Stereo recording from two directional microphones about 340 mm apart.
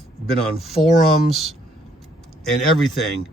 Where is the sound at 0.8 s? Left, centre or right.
Centre.